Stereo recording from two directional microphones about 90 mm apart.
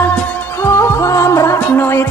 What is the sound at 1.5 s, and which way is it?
Music, 25° left (ahead or behind).